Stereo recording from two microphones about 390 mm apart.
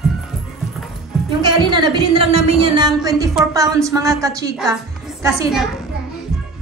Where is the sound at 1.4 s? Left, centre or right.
Centre.